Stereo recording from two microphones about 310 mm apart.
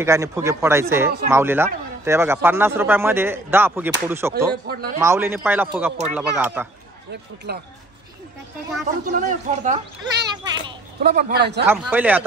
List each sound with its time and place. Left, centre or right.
0.0 s a man's voice: centre
4.7 s a man's voice: right
5.0 s a man's voice: centre
7.5 s a man's voice: right
9.1 s a man's voice: right
11.6 s speech: centre